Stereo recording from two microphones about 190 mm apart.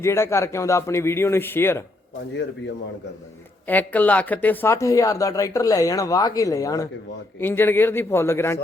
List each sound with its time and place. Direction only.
0.0 s speech: 15° left (ahead or behind)
3.7 s speech: 10° left (ahead or behind)